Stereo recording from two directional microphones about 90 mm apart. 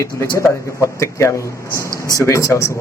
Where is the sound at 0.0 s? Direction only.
35° left (ahead or behind).